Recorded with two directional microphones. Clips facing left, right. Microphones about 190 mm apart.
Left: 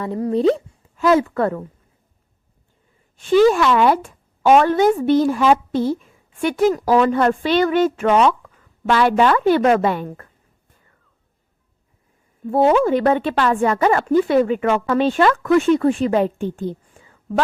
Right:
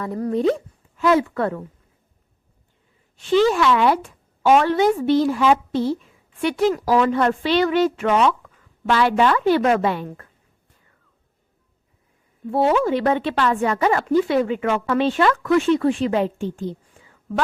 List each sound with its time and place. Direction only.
0.0 s speech: 30° left (ahead or behind); by 1.6 s 45° left (ahead or behind)
3.2 s speech: 50° left (ahead or behind)
12.5 s speech: 50° left (ahead or behind)